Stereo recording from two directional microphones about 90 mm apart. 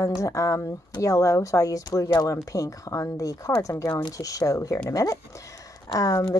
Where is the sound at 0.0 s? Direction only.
35° left (ahead or behind).